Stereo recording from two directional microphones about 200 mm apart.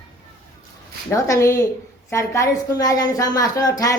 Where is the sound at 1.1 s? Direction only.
15° left (ahead or behind).